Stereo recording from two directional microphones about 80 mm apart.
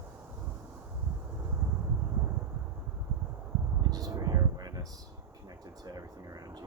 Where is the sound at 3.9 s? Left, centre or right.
Right.